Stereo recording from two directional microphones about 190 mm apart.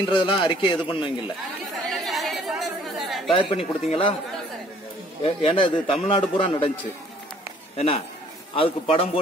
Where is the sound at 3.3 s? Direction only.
30° left (ahead or behind).